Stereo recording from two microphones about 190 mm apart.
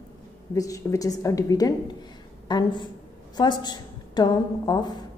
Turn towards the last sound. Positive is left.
turn(degrees=20)  # may be behind; listen again after turning